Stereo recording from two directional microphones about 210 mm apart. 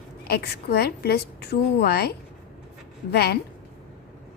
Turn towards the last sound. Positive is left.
turn(degrees=50)  # may be behind; listen again after turning